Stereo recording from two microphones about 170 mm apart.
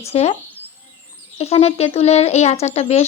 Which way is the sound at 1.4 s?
35° left (ahead or behind).